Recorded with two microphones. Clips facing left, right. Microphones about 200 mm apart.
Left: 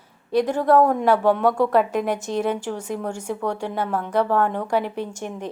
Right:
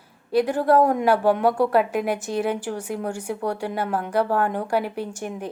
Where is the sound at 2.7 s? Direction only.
60° right (ahead or behind).